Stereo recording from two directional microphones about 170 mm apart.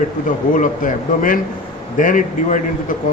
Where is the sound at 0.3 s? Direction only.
50° left (ahead or behind).